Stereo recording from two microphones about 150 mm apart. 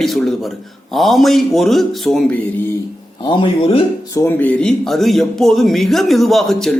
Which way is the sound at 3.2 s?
35° left (ahead or behind).